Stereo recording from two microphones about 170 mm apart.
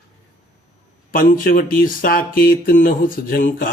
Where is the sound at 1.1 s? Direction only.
60° left (ahead or behind).